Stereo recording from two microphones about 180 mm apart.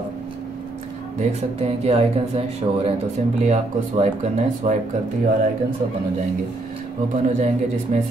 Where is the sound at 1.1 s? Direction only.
35° right (ahead or behind).